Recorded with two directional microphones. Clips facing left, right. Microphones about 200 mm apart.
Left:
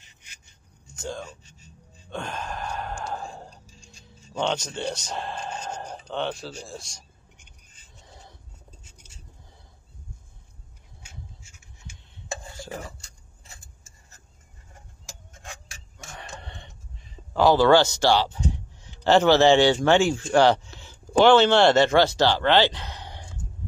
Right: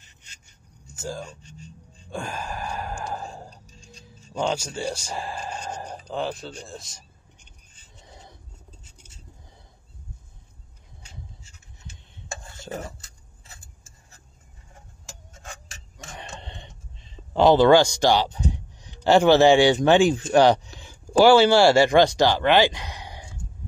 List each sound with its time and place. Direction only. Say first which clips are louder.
0.9 s speech: right 1 dB; 5° right (ahead or behind)
2.0 s sigh: right 1 dB; 5° right (ahead or behind)
4.4 s speech: right 1 dB; 10° right (ahead or behind)
12.6 s stir: right 4 dB; 20° right (ahead or behind)
16.1 s speech: right 1 dB; 20° right (ahead or behind)